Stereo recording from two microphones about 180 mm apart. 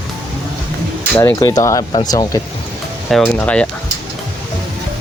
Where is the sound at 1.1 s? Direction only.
15° left (ahead or behind).